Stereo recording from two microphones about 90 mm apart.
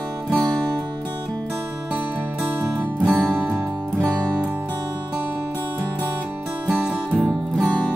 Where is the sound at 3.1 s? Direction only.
20° right (ahead or behind).